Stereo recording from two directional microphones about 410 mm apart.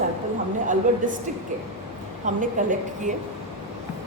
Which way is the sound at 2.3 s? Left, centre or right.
Centre.